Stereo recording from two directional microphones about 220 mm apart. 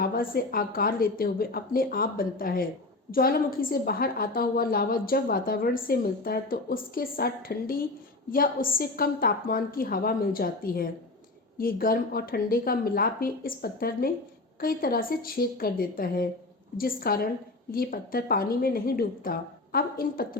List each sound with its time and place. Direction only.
0.0 s a woman's voice: 40° left (ahead or behind)